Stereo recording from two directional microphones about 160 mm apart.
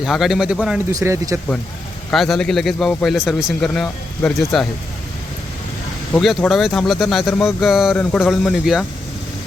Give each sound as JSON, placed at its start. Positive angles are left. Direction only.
{"t": 0.0, "sound": "speech", "side_deg": 0}
{"t": 0.9, "sound": "speech", "side_deg": -20}
{"t": 2.0, "sound": "speech", "side_deg": 0}
{"t": 6.1, "sound": "speech", "side_deg": 5}